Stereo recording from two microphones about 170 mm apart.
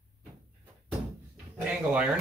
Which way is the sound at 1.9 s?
5° right (ahead or behind).